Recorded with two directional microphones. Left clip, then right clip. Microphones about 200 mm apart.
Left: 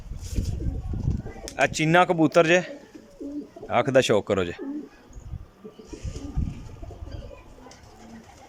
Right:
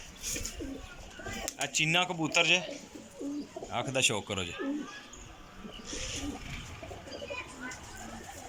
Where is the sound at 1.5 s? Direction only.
65° left (ahead or behind).